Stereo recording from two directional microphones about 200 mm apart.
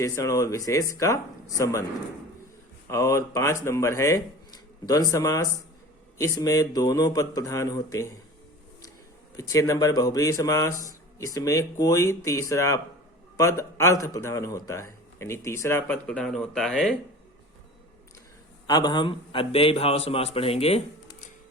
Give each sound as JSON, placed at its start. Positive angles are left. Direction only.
{"t": 0.0, "sound": "speech", "side_deg": 15}
{"t": 2.9, "sound": "speech", "side_deg": 15}
{"t": 9.3, "sound": "speech", "side_deg": 15}
{"t": 18.7, "sound": "a man's voice", "side_deg": 20}